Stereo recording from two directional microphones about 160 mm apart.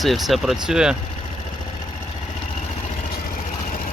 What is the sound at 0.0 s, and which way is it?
Speech, centre (ahead or behind).